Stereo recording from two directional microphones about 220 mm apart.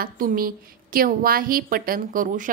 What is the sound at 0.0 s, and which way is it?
A woman's voice, 40° right (ahead or behind).